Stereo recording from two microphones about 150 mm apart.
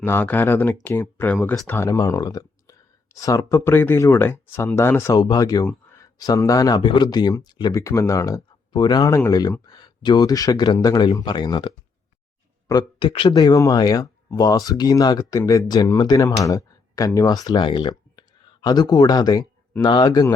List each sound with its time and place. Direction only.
0.0 s speech: 15° left (ahead or behind); by 11.7 s 30° left (ahead or behind)
13.0 s speech: 35° left (ahead or behind)
13.3 s speech: 25° left (ahead or behind)